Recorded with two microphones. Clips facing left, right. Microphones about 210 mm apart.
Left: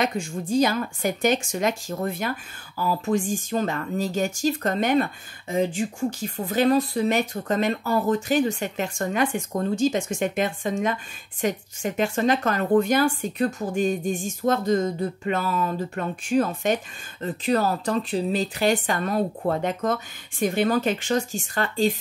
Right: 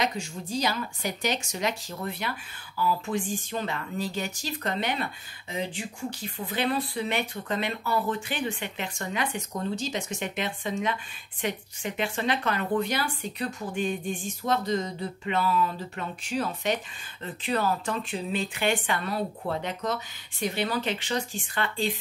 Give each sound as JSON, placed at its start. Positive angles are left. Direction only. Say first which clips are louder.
{"t": 0.0, "sound": "speech", "louder": "left 5 dB", "side_deg": 50}